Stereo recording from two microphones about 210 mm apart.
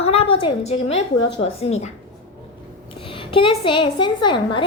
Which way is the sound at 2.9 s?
25° left (ahead or behind).